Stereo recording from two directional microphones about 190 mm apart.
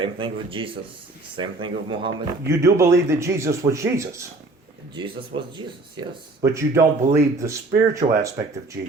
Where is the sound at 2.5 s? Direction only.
15° right (ahead or behind).